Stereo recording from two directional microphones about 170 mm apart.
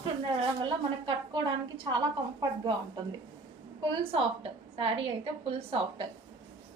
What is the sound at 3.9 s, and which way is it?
A woman's voice, 35° right (ahead or behind).